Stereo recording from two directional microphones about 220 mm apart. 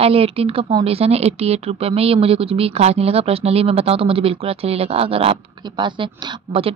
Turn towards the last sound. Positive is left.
turn(degrees=-25)  # may be behind; listen again after turning